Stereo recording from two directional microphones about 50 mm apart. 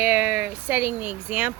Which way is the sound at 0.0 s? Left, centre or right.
Right.